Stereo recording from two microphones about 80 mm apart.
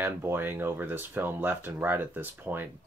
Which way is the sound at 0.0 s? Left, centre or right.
Right.